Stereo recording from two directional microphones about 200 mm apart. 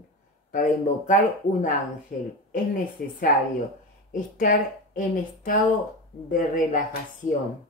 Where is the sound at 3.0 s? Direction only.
Centre (ahead or behind).